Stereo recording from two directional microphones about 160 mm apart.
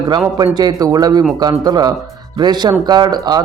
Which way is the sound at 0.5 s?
25° right (ahead or behind).